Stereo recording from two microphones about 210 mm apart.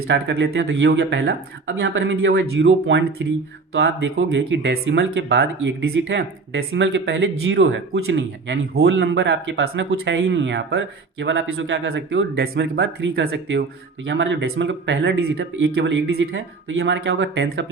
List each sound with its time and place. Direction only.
0.1 s speech: 55° right (ahead or behind)